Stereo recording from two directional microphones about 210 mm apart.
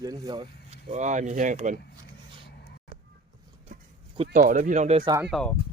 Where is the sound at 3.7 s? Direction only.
40° right (ahead or behind).